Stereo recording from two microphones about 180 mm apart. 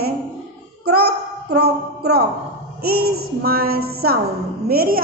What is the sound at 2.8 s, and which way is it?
A child's voice, 60° right (ahead or behind).